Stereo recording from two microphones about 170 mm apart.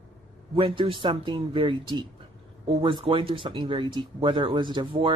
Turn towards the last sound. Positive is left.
turn(degrees=-30)  # may be behind; listen again after turning